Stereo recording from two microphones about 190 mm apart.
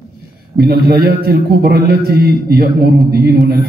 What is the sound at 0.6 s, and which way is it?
A man's voice, 55° right (ahead or behind).